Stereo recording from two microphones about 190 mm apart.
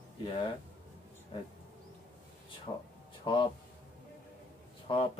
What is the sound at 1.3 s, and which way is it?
Speech, 25° left (ahead or behind).